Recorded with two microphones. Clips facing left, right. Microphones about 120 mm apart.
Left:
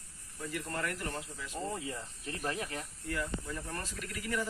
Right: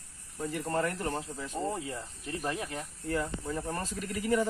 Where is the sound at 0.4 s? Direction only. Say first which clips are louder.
Right 6 dB; 30° right (ahead or behind).